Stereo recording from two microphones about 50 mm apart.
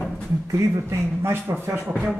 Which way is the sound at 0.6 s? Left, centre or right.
Right.